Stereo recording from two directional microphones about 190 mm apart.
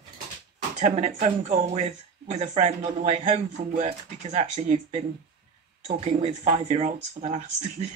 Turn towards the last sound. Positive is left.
turn(degrees=-35)  # may be behind; listen again after turning